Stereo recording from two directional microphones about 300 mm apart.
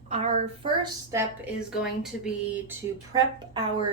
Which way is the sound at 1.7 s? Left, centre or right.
Centre.